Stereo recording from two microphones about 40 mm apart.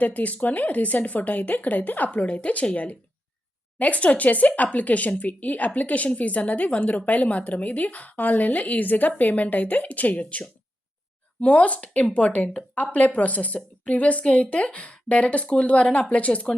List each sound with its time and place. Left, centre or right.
0.0 s speech: left
2.2 s speech: left